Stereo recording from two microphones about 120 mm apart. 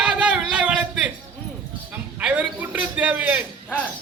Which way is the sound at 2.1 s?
10° right (ahead or behind).